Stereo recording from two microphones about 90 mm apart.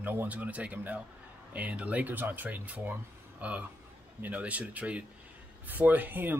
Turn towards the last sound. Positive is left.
turn(degrees=-20)  # may be behind; listen again after turning